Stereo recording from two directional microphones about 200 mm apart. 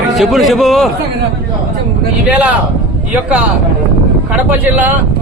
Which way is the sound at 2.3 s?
5° right (ahead or behind).